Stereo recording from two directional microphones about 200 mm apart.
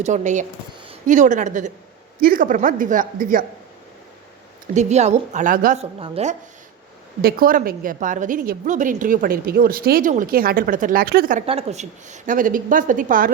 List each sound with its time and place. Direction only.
0.0 s a woman's voice: 35° right (ahead or behind)
4.7 s a woman's voice: 35° right (ahead or behind)
7.2 s a woman's voice: 50° right (ahead or behind)
11.4 s a woman's voice: 30° right (ahead or behind)